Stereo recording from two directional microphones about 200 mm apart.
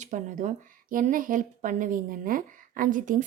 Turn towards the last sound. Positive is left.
turn(degrees=-40)  # may be behind; listen again after turning